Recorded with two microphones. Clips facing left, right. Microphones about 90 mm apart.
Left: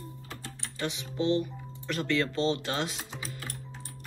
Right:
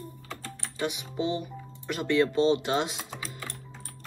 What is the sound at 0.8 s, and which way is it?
Speech, 15° right (ahead or behind).